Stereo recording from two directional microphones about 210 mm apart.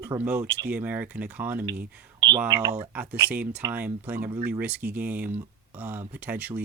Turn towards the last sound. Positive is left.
turn(degrees=-10)  # may be behind; listen again after turning